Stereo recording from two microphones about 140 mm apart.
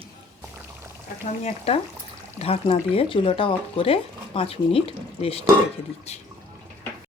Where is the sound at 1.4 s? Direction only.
45° left (ahead or behind).